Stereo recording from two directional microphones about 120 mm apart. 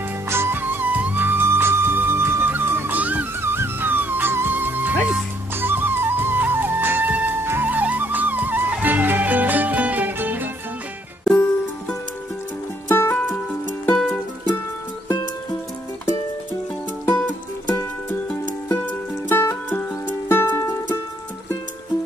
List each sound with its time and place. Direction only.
0.3 s music: 20° right (ahead or behind)
11.3 s music: 15° left (ahead or behind)
13.9 s music: 5° left (ahead or behind)
18.7 s music: 20° left (ahead or behind)